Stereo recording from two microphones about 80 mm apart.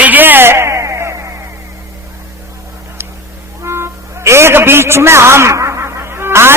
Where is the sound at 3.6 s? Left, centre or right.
Right.